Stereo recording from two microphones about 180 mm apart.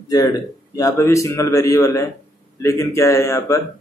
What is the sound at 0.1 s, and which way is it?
Speech, 20° left (ahead or behind).